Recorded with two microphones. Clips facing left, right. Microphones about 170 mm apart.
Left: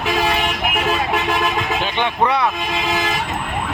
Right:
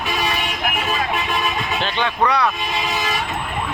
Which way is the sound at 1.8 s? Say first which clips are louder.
Right 1 dB; 20° left (ahead or behind).